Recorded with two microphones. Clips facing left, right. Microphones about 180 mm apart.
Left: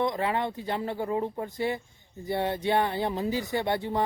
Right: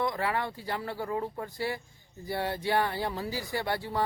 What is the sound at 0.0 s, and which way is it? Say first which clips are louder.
Speech: left 3 dB; 20° left (ahead or behind).